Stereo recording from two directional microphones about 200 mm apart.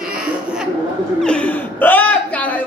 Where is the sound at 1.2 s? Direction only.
5° left (ahead or behind).